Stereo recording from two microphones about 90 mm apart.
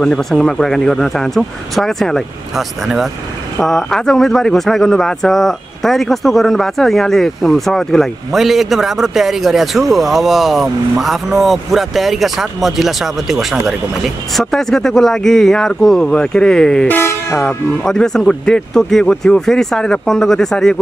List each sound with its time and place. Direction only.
0.0 s speech: 5° left (ahead or behind)
16.8 s speech: 25° left (ahead or behind)
17.8 s speech: 5° left (ahead or behind)